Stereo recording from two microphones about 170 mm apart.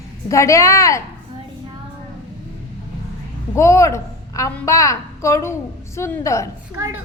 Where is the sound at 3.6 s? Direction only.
15° left (ahead or behind).